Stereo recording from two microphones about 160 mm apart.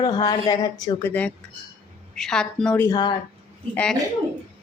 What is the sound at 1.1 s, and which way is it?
A woman's voice, 10° left (ahead or behind).